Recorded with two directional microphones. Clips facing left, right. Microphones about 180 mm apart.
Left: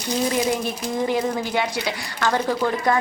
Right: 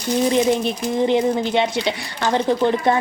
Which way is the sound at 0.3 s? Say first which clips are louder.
Right 6 dB; 20° right (ahead or behind).